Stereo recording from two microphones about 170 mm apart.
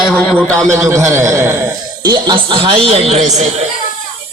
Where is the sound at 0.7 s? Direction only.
15° right (ahead or behind).